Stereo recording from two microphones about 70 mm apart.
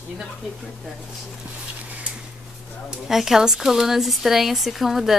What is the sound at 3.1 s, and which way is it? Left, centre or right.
A woman's voice, centre.